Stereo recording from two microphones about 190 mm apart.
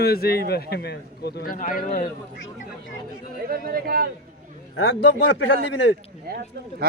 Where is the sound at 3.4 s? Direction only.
50° right (ahead or behind).